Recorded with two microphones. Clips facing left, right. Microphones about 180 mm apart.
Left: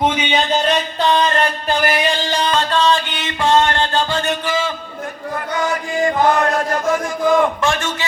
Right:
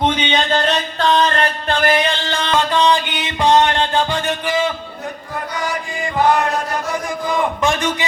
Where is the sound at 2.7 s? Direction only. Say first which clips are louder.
Right 1 dB; 15° right (ahead or behind).